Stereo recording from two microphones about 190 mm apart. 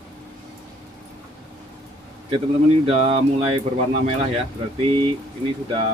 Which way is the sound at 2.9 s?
30° right (ahead or behind).